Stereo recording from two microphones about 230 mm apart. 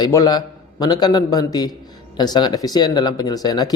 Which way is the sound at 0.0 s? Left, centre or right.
Centre.